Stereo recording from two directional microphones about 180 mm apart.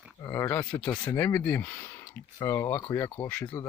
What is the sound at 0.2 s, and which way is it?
Speech, 15° left (ahead or behind).